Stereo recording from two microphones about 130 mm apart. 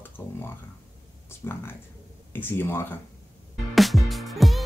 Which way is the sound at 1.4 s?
20° left (ahead or behind).